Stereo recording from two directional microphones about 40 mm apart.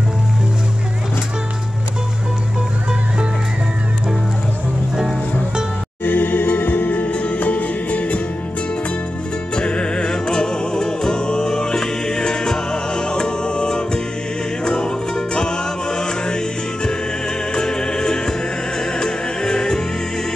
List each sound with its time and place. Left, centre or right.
6.0 s music: left
7.0 s music: left
9.6 s music: left